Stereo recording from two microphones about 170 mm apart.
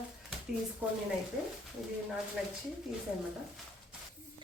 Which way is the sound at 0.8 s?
10° right (ahead or behind).